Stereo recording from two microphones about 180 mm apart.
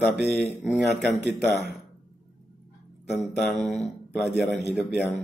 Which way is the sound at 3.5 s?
40° left (ahead or behind).